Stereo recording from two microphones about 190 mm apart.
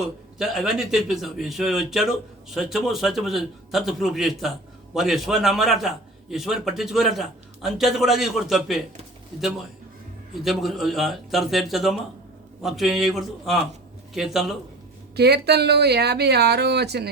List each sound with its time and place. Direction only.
0.0 s a man's voice: centre (ahead or behind)
10.4 s a man's voice: centre (ahead or behind)
15.1 s speech: 60° right (ahead or behind)